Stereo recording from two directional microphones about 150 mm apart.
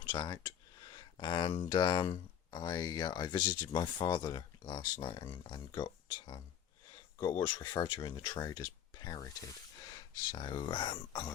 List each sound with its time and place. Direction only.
0.0 s speech: 30° left (ahead or behind)